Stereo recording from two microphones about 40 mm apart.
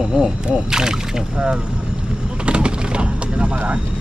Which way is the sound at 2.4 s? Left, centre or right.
Right.